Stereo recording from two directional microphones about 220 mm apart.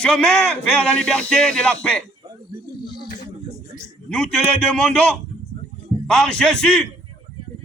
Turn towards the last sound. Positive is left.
turn(degrees=5)  # may be behind; listen again after turning